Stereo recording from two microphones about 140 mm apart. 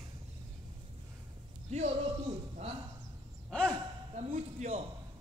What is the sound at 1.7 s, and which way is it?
Speech, 50° right (ahead or behind).